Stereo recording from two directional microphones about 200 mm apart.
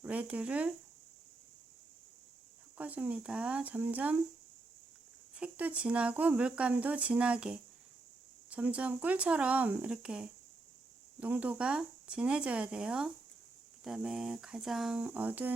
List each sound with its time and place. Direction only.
0.0 s speech: 5° right (ahead or behind)
2.7 s speech: 10° right (ahead or behind)
5.4 s speech: 5° right (ahead or behind)